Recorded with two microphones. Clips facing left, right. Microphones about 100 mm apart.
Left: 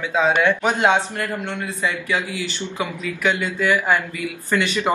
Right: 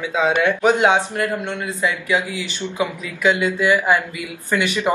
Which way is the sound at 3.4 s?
10° right (ahead or behind).